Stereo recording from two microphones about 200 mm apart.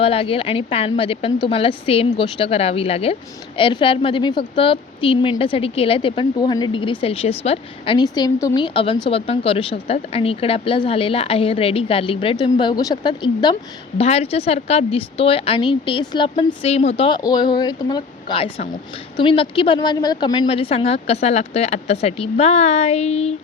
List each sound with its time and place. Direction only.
0.0 s a woman's voice: 30° left (ahead or behind)